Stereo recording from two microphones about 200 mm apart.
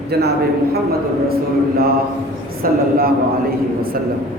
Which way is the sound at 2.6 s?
45° right (ahead or behind).